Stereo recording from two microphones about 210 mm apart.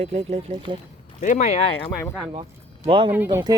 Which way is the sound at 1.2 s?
35° left (ahead or behind).